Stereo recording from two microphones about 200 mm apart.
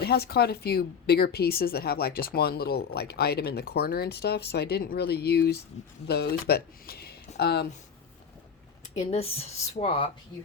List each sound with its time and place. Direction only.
0.0 s a woman's voice: 50° left (ahead or behind)
9.0 s speech: 30° left (ahead or behind)